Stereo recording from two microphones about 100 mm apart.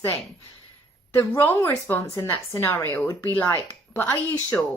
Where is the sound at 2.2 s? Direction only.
40° left (ahead or behind).